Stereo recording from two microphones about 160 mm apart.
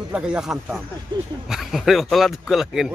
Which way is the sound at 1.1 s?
30° right (ahead or behind).